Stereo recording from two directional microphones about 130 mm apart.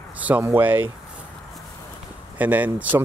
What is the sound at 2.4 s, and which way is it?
Speech, 10° right (ahead or behind).